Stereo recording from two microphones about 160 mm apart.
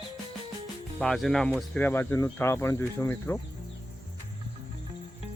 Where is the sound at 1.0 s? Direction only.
Centre (ahead or behind).